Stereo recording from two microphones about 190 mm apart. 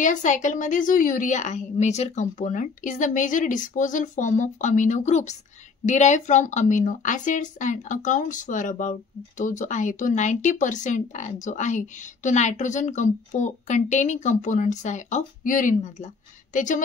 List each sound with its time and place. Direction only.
0.0 s a woman's voice: 40° left (ahead or behind)